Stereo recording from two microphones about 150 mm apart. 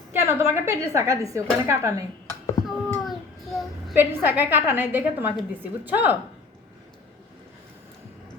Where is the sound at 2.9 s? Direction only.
Centre (ahead or behind).